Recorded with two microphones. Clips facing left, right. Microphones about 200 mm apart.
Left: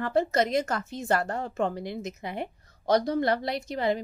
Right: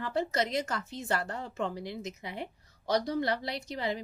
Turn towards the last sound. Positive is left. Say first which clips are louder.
# left 6 dB
turn(degrees=50)  # may be behind; listen again after turning